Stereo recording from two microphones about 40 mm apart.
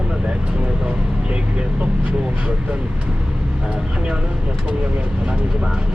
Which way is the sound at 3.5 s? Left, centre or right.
Right.